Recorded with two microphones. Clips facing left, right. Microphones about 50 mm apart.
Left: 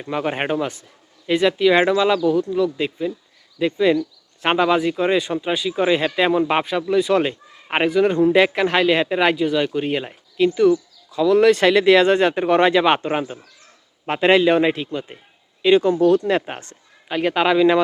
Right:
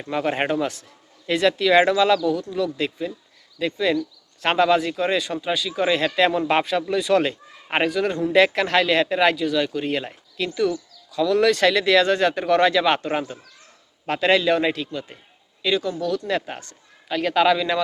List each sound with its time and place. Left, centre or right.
0.0 s a man's voice: centre
15.6 s speech: left